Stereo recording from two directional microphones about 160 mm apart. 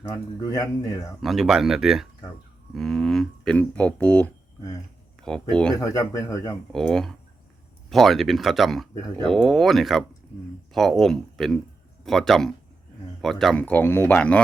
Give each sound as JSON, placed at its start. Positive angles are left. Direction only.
{"t": 0.1, "sound": "speech", "side_deg": 20}
{"t": 1.2, "sound": "speech", "side_deg": 0}
{"t": 5.2, "sound": "speech", "side_deg": 5}
{"t": 5.7, "sound": "speech", "side_deg": 20}
{"t": 6.7, "sound": "speech", "side_deg": 5}